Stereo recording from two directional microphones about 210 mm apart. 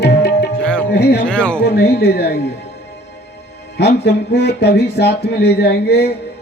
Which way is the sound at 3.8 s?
55° left (ahead or behind).